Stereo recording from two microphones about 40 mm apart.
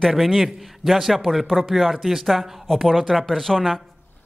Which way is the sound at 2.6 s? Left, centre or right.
Centre.